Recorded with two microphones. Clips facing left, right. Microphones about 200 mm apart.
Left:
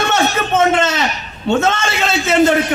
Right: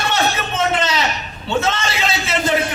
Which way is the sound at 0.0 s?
50° left (ahead or behind).